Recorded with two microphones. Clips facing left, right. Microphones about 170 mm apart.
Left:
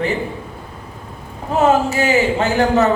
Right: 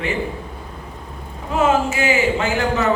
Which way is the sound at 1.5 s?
40° left (ahead or behind).